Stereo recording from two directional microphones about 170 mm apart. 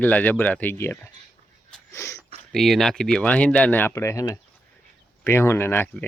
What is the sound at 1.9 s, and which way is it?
Sneeze, 15° left (ahead or behind).